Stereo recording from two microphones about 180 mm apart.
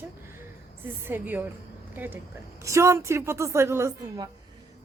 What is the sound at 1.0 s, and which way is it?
A woman's voice, 10° right (ahead or behind).